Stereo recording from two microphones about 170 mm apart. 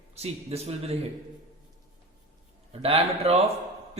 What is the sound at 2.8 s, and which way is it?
Speech, 35° right (ahead or behind).